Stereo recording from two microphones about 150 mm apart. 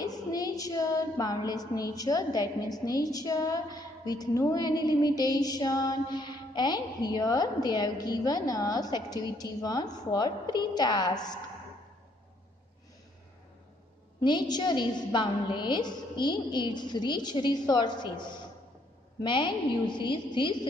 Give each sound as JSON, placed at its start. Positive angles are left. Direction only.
{"t": 0.0, "sound": "a woman's voice", "side_deg": 25}
{"t": 14.2, "sound": "a woman's voice", "side_deg": 30}